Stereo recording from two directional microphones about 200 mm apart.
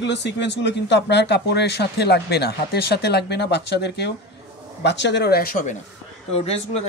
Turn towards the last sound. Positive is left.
turn(degrees=30)  # may be behind; listen again after turning